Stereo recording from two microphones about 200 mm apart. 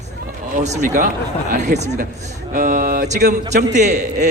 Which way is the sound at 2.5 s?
40° right (ahead or behind).